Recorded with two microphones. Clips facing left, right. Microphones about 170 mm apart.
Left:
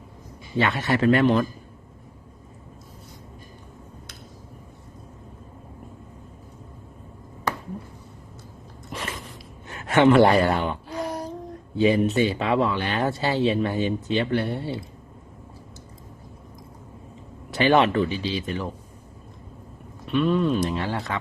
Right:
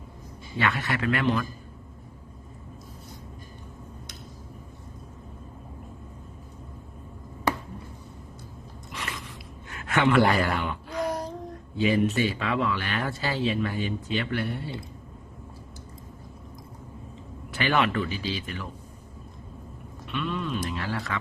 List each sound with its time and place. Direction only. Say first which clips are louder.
0.5 s speech: left 4 dB; 25° left (ahead or behind)
0.9 s a man's voice: left 10 dB; 35° left (ahead or behind)
8.9 s biting: left 4 dB; 35° left (ahead or behind)
9.6 s a sound: left 7 dB; 20° left (ahead or behind)
10.2 s speech: left 5 dB; 25° left (ahead or behind)
17.6 s speech: left 6 dB; 25° left (ahead or behind)
20.1 s a man's voice: left 9 dB; 40° left (ahead or behind)
20.7 s speech: left 4 dB; 25° left (ahead or behind)